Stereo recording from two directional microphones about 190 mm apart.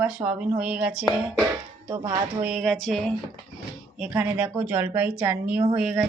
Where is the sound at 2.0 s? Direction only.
30° right (ahead or behind).